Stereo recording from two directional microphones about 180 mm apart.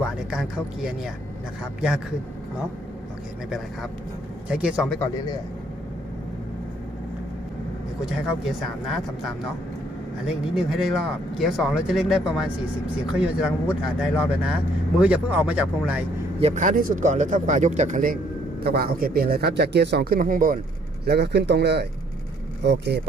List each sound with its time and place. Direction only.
0.3 s speech: 5° right (ahead or behind)
4.4 s speech: 5° right (ahead or behind)
8.4 s speech: centre (ahead or behind)
16.4 s a man's voice: 40° right (ahead or behind)
21.0 s speech: 65° right (ahead or behind)